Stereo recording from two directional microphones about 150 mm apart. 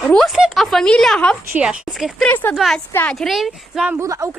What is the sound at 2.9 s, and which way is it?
Speech, 15° left (ahead or behind).